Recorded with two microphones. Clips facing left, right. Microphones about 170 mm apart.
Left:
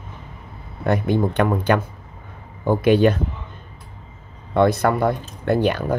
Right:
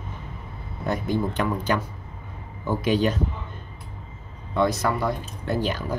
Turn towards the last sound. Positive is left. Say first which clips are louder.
# left 7 dB
turn(degrees=60)  # may be behind; listen again after turning